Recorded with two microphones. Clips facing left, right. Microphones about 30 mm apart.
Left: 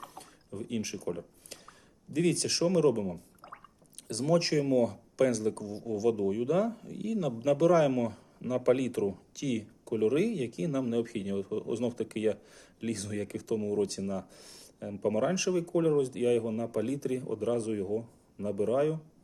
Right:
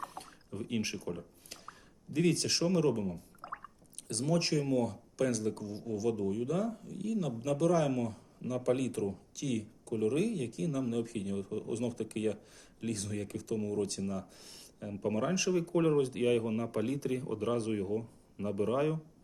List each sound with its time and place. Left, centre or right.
0.2 s a sound: centre
0.8 s a man's voice: right
1.0 s speech: centre
7.3 s speech: centre
9.9 s speech: centre
10.2 s speech: centre
15.7 s a man's voice: right